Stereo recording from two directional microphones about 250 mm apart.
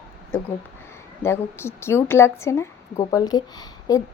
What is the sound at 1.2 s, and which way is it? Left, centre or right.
A woman's voice, centre.